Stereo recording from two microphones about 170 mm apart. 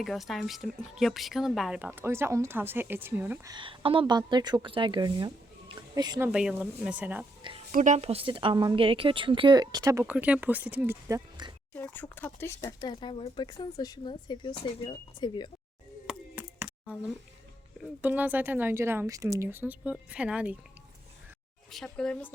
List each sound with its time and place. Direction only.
0.0 s speech: centre (ahead or behind)
3.5 s a woman's voice: 30° right (ahead or behind)
6.2 s speech: 10° right (ahead or behind)
7.7 s speech: 45° right (ahead or behind); by 10.9 s 10° right (ahead or behind)
11.1 s speech: 25° right (ahead or behind)
11.7 s speech: 10° left (ahead or behind)
16.0 s a sound: 10° right (ahead or behind)
18.0 s speech: 10° right (ahead or behind)
21.7 s a woman's voice: 5° left (ahead or behind)